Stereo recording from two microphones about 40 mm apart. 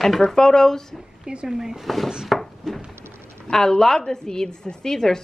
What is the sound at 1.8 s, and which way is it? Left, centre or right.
Speech, centre.